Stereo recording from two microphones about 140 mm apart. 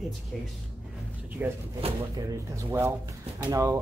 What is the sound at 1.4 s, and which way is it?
Speech, 10° right (ahead or behind).